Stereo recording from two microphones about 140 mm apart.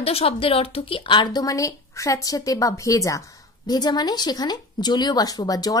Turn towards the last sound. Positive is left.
turn(degrees=25)  # may be behind; listen again after turning